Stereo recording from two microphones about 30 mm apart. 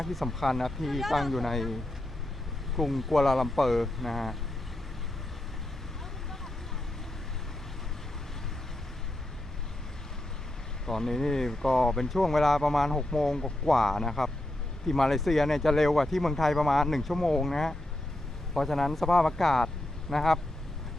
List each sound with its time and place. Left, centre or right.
0.0 s speech: centre
2.7 s speech: centre
10.8 s speech: centre